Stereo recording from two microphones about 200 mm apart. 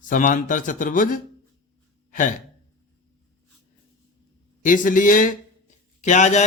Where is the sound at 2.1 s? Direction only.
40° left (ahead or behind).